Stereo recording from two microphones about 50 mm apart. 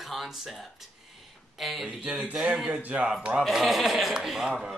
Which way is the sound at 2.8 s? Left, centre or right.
Right.